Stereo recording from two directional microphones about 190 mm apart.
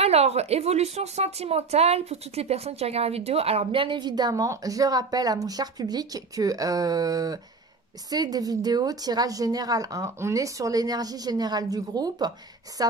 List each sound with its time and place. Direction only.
0.0 s a woman's voice: 35° right (ahead or behind)